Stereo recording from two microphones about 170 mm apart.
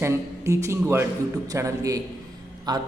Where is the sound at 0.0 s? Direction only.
15° right (ahead or behind).